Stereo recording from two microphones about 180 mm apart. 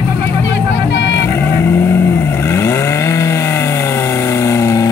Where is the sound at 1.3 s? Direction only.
15° left (ahead or behind).